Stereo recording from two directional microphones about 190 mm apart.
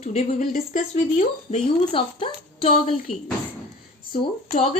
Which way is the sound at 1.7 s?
25° left (ahead or behind).